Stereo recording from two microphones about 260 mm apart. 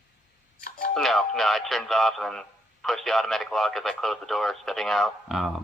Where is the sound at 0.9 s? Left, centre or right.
Centre.